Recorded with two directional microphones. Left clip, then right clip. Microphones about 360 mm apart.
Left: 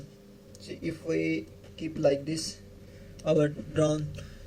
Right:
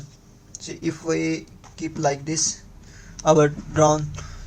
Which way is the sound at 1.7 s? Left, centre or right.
Right.